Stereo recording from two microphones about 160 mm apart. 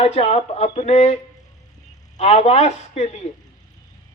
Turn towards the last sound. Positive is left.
turn(degrees=45)  # may be behind; listen again after turning